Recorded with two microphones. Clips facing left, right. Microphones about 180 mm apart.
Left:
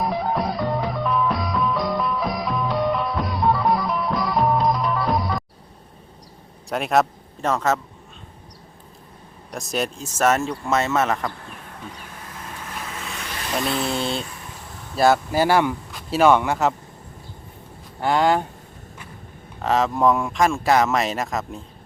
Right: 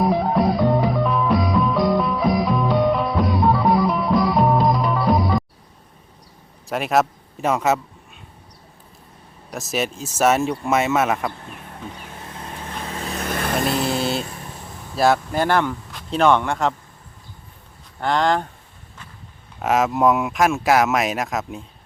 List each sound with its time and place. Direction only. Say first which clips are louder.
0.0 s music: right 5 dB; centre (ahead or behind)
6.7 s a man's voice: even; centre (ahead or behind)
9.5 s speech: right 1 dB; 5° right (ahead or behind)
12.2 s vehicle: right 3 dB; 25° right (ahead or behind)
13.9 s speech: right 2 dB; 5° right (ahead or behind)
18.0 s speech: left 1 dB; 10° left (ahead or behind)
19.6 s speech: right 1 dB; 5° right (ahead or behind)